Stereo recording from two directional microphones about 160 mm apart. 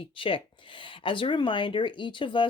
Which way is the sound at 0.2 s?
35° left (ahead or behind).